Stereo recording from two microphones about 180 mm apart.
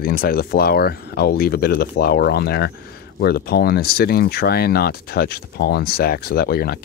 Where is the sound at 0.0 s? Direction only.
55° left (ahead or behind).